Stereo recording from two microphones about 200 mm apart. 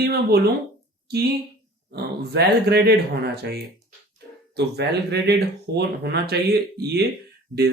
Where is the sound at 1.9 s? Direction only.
55° right (ahead or behind).